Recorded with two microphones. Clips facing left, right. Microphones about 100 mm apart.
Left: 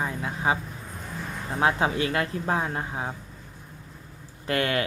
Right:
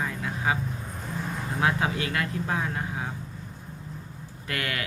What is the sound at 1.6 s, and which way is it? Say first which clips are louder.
Speech: left 3 dB; 30° left (ahead or behind).